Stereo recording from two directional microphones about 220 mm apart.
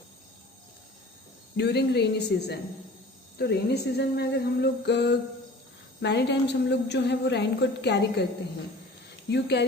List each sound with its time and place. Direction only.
1.5 s a woman's voice: 50° left (ahead or behind)
9.3 s a woman's voice: 50° left (ahead or behind)